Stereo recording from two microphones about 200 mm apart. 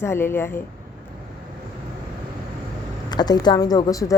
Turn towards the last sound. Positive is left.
turn(degrees=15)  # may be behind; listen again after turning